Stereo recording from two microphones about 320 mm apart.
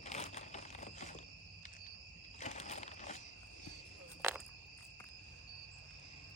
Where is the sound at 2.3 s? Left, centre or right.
Left.